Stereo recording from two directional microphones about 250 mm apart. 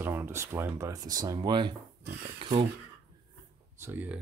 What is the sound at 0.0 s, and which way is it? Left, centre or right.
Speech, centre.